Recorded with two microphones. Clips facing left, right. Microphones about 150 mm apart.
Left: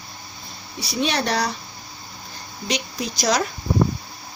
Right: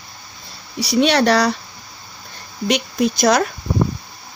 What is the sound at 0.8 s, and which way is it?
Speech, 75° right (ahead or behind).